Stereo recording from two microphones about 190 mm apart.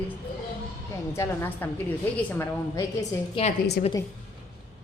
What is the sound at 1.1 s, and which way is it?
A woman's voice, 15° left (ahead or behind).